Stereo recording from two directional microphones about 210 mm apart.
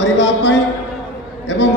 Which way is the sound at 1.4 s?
55° left (ahead or behind).